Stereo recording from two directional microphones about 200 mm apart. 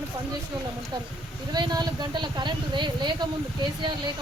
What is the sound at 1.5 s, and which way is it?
Speech, 20° right (ahead or behind).